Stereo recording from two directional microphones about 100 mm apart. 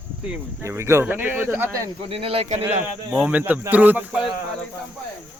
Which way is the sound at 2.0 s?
70° right (ahead or behind).